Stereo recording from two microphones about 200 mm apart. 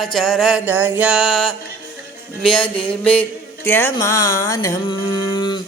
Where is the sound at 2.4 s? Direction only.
5° left (ahead or behind).